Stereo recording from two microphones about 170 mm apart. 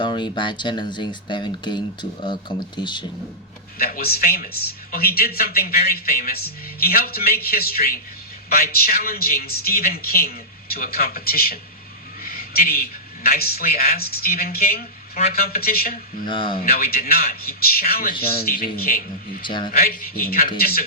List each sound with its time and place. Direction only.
0.0 s speech: 25° left (ahead or behind)
3.8 s a man's voice: 60° left (ahead or behind)
12.2 s a sound: 60° left (ahead or behind)
13.2 s a man's voice: 65° left (ahead or behind)
16.2 s speech: 30° left (ahead or behind)
16.6 s a man's voice: 65° left (ahead or behind)
19.4 s speech: 30° left (ahead or behind)
19.7 s a man's voice: 60° left (ahead or behind)